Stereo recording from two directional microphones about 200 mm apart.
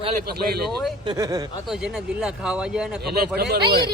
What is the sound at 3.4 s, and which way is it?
Speech, 50° right (ahead or behind).